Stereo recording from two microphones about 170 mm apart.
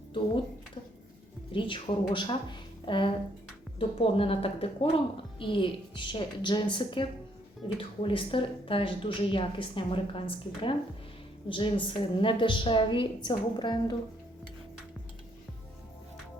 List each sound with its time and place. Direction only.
1.5 s a woman's voice: 30° left (ahead or behind)